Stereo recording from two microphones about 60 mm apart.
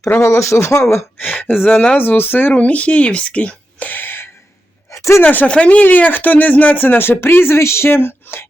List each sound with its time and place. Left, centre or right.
0.2 s speech: left
1.2 s speech: left
2.0 s speech: left
2.5 s speech: left
4.9 s a sound: left
5.2 s speech: left